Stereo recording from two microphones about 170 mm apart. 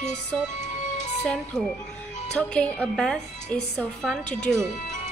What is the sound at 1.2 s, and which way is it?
A woman's voice, 5° left (ahead or behind).